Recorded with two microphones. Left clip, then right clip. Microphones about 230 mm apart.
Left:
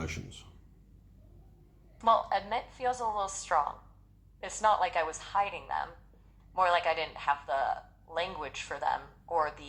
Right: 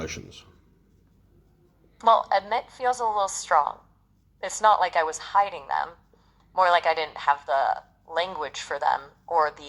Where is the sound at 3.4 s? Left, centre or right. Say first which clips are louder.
Right 7 dB; right.